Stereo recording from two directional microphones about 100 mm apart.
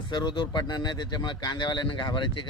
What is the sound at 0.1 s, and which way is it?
Speech, 50° left (ahead or behind).